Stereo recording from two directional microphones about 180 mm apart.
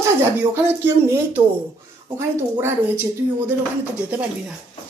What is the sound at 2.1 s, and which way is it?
Speech, 15° right (ahead or behind).